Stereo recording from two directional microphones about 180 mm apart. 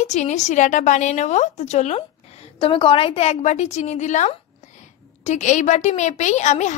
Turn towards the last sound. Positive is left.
turn(degrees=40)  # may be behind; listen again after turning